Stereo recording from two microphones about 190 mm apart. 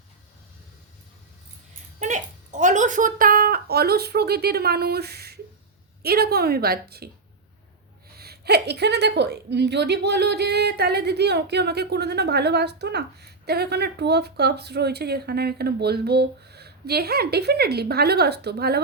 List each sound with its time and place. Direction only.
2.0 s a woman's voice: 40° right (ahead or behind); by 7.1 s 55° right (ahead or behind)
8.1 s a woman's voice: 55° right (ahead or behind)